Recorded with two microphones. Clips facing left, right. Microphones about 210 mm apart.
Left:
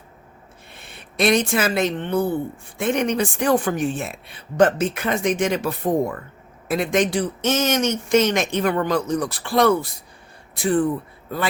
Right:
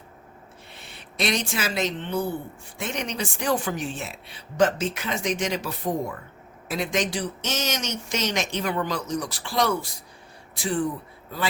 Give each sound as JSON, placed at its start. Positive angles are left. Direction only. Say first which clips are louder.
{"t": 0.7, "sound": "speech", "louder": "left 4 dB", "side_deg": 55}